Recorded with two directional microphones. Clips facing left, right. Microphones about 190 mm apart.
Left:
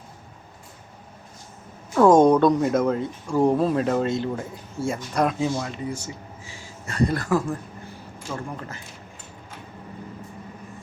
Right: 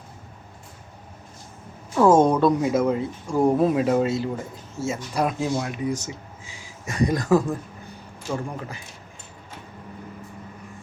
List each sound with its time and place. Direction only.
2.0 s speech: 5° right (ahead or behind)